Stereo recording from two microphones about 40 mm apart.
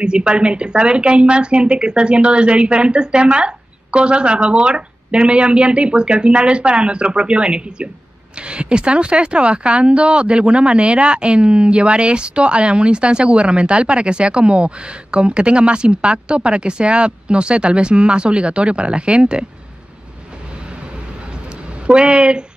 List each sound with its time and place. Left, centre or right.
0.0 s speech: right
21.8 s speech: right